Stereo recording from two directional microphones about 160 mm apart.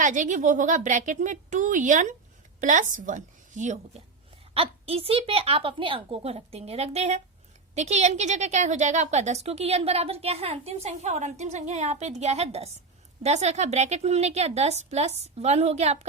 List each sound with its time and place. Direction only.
0.0 s a woman's voice: 50° right (ahead or behind)
4.5 s a woman's voice: 35° right (ahead or behind)